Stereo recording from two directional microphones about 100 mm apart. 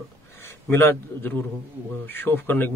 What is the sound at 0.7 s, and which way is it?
A man's voice, 20° left (ahead or behind).